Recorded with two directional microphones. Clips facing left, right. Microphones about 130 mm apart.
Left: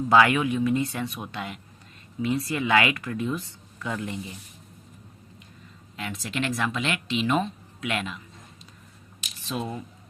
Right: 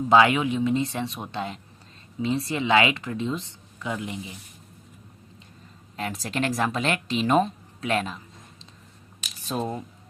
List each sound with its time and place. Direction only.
0.1 s speech: 20° right (ahead or behind)
6.0 s speech: 40° right (ahead or behind)
9.4 s speech: 40° right (ahead or behind)